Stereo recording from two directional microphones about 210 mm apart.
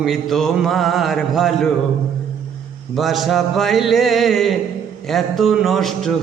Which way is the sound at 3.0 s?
Centre (ahead or behind).